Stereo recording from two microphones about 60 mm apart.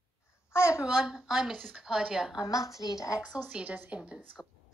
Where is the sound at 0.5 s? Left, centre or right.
Left.